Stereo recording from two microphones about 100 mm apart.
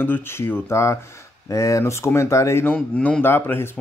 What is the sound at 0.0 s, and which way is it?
Speech, 20° left (ahead or behind).